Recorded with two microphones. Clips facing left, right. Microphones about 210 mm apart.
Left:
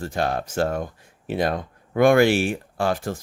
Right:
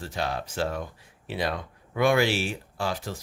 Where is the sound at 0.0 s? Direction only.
50° left (ahead or behind).